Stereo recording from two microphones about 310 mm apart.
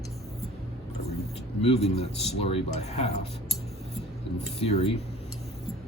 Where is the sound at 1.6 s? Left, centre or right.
Centre.